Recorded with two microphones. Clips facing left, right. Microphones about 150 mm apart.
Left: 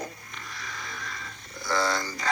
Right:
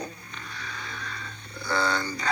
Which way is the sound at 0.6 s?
40° left (ahead or behind).